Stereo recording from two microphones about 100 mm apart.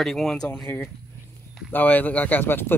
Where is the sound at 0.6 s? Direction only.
20° left (ahead or behind).